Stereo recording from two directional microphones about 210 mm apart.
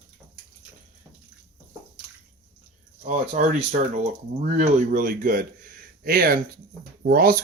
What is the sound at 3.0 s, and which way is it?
Speech, 35° right (ahead or behind).